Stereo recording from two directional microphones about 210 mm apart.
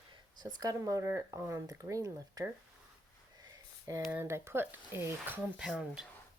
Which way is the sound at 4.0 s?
5° right (ahead or behind).